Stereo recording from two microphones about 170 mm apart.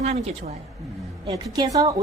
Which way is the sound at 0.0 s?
45° right (ahead or behind).